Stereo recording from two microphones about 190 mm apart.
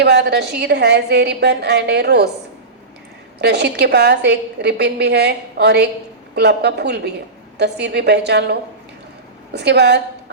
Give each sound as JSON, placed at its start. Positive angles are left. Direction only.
{"t": 0.0, "sound": "a woman's voice", "side_deg": -60}
{"t": 3.3, "sound": "a woman's voice", "side_deg": -60}